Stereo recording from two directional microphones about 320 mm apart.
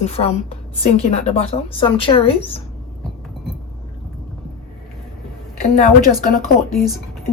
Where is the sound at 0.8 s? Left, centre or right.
Centre.